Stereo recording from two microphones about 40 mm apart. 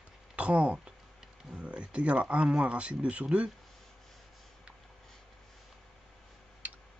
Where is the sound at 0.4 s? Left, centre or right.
Right.